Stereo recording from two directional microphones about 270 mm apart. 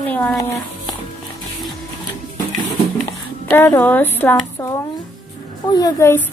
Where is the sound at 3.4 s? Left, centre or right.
Centre.